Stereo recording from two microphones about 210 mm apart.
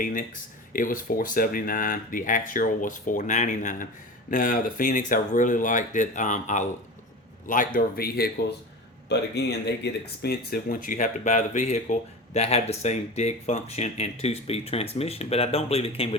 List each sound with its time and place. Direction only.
0.0 s a man's voice: 40° left (ahead or behind)